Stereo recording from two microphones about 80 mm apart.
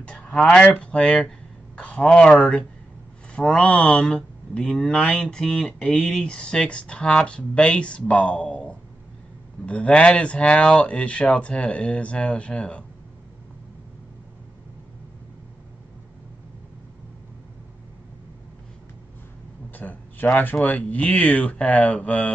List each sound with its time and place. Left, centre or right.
0.0 s speech: centre
3.3 s speech: centre
19.7 s speech: left